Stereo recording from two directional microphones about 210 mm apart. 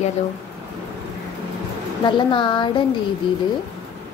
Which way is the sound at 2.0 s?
25° left (ahead or behind).